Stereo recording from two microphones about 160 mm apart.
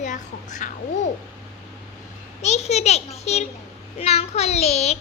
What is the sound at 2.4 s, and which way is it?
A woman's voice, 45° left (ahead or behind).